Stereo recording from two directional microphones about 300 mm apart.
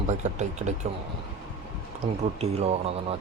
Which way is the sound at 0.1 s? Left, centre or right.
Right.